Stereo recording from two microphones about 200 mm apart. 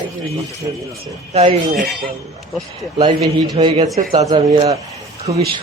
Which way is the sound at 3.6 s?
30° right (ahead or behind).